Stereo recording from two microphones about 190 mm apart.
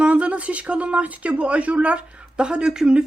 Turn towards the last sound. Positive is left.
turn(degrees=-5)  # may be behind; listen again after turning